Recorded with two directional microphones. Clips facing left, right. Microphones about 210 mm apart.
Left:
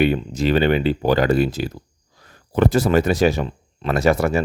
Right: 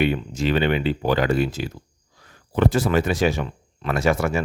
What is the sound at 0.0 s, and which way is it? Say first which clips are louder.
Speech: left 3 dB; 40° left (ahead or behind).